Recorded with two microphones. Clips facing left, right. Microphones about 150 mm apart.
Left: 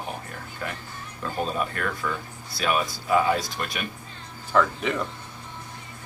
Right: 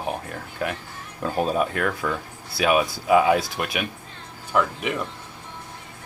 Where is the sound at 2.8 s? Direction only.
85° right.